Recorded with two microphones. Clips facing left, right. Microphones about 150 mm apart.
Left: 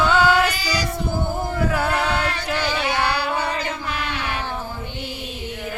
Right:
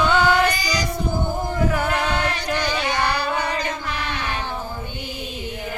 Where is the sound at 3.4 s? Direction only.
15° right (ahead or behind).